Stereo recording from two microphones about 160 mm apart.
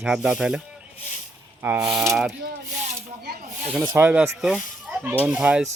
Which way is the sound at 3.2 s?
75° right (ahead or behind).